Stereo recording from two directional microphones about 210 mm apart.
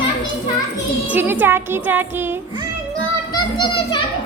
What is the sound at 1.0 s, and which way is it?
Music, 10° right (ahead or behind).